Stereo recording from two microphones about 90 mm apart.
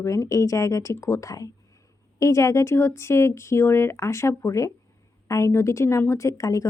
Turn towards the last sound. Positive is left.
turn(degrees=40)  # may be behind; listen again after turning